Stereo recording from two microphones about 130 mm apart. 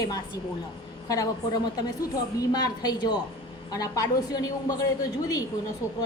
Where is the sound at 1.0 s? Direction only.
25° left (ahead or behind).